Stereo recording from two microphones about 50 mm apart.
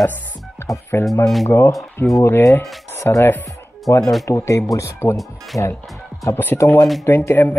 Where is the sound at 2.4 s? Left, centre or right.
Left.